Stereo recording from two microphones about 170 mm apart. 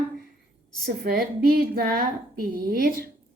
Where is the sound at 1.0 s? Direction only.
65° right (ahead or behind).